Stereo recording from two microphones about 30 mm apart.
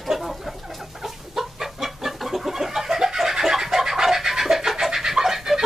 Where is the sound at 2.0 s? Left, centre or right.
Centre.